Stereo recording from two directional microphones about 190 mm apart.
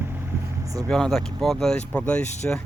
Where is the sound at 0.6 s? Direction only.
20° right (ahead or behind).